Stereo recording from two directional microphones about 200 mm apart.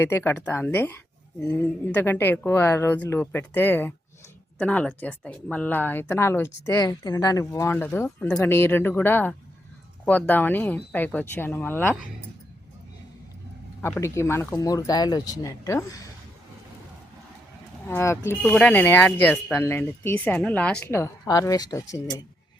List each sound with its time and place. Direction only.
0.0 s speech: 10° left (ahead or behind)
13.8 s speech: 15° left (ahead or behind)
17.8 s speech: 15° left (ahead or behind)